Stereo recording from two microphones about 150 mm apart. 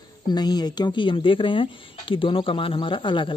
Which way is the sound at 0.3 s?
25° left (ahead or behind).